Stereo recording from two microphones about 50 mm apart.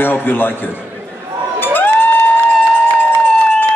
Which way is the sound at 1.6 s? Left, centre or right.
Left.